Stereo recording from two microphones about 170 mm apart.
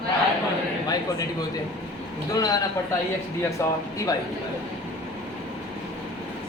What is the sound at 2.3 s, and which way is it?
Speech, 20° left (ahead or behind).